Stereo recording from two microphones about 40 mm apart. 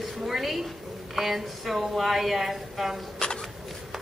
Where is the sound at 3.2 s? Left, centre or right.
Left.